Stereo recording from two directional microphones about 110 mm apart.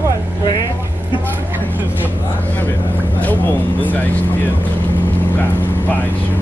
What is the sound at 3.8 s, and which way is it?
Speech, 15° left (ahead or behind).